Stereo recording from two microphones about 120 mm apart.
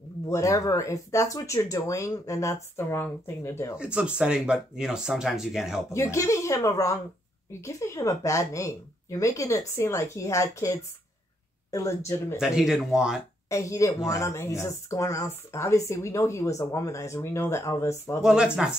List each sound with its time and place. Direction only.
0.3 s speech: 25° left (ahead or behind)
3.7 s speech: 10° right (ahead or behind)
5.9 s speech: 25° left (ahead or behind)
12.4 s speech: 5° right (ahead or behind)
13.5 s speech: 25° left (ahead or behind)
18.2 s speech: 5° right (ahead or behind)